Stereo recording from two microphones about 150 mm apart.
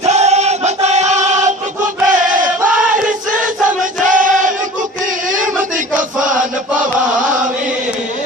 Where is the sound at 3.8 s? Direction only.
60° right (ahead or behind).